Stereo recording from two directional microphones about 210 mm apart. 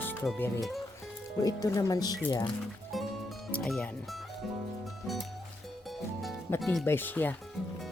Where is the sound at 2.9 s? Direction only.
Centre (ahead or behind).